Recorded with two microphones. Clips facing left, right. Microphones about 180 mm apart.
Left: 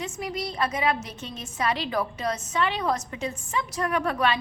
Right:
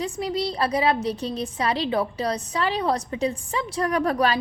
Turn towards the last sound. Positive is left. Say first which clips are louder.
# right 3 dB
turn(degrees=-35)  # may be behind; listen again after turning